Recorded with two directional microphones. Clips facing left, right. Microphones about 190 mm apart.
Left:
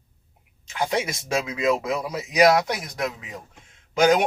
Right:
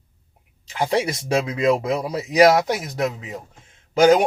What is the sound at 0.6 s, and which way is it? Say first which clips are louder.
Speech: right 4 dB; 35° right (ahead or behind).